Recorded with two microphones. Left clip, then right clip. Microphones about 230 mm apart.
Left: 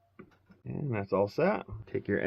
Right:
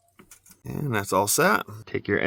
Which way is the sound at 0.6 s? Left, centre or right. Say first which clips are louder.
Right 8 dB; right.